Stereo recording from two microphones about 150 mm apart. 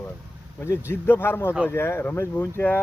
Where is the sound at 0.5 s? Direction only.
15° left (ahead or behind).